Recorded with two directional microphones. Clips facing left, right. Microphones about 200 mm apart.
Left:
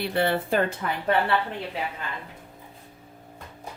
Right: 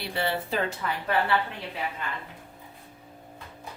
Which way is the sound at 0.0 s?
55° left (ahead or behind).